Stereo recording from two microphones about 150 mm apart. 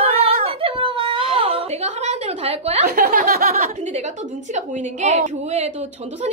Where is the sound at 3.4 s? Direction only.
45° right (ahead or behind).